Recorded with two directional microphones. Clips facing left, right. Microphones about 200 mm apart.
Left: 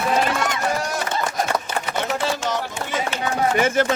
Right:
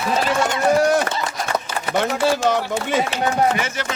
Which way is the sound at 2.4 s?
60° right (ahead or behind).